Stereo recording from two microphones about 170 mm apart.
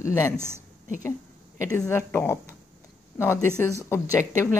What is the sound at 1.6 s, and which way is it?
Speech, 15° left (ahead or behind).